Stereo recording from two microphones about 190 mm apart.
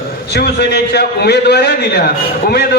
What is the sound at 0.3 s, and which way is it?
A man's voice, 60° left (ahead or behind).